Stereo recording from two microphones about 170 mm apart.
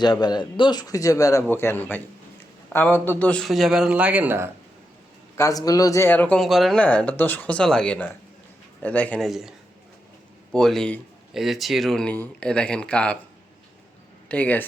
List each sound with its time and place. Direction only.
0.0 s speech: 25° left (ahead or behind); by 4.5 s 15° right (ahead or behind)
5.4 s speech: 20° left (ahead or behind)
14.3 s speech: 10° left (ahead or behind)